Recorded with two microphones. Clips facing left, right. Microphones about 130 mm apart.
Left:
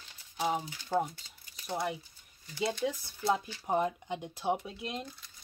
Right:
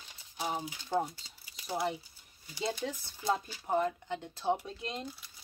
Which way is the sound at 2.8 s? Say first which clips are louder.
Left 3 dB; 10° left (ahead or behind).